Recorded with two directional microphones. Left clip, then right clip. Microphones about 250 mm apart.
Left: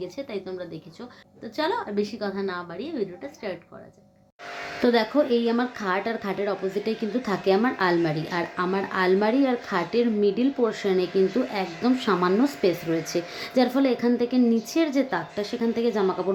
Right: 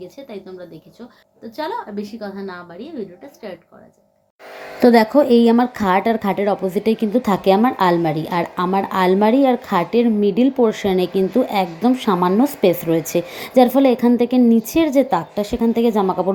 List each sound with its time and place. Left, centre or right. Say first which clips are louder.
1.5 s a woman's voice: even; centre
4.8 s speech: right 9 dB; right